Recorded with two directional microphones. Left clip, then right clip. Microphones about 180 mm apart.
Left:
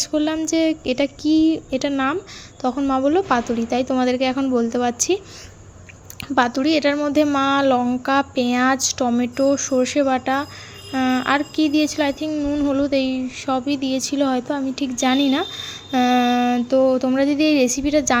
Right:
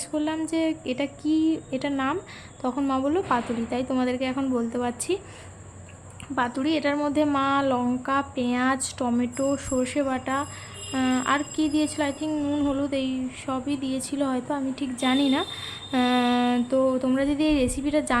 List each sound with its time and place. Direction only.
0.0 s speech: 25° left (ahead or behind)
6.2 s speech: 35° left (ahead or behind)